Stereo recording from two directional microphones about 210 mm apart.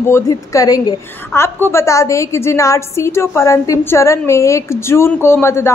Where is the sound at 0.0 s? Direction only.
15° left (ahead or behind).